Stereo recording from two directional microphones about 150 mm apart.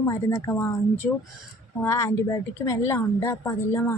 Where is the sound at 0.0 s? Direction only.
20° left (ahead or behind).